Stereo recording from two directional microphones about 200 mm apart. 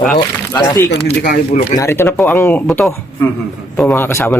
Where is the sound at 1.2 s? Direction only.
45° left (ahead or behind).